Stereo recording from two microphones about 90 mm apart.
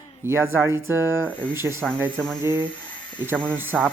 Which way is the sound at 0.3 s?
25° right (ahead or behind).